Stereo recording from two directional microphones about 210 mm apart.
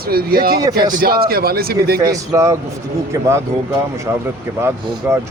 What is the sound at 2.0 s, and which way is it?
Speech, 15° right (ahead or behind).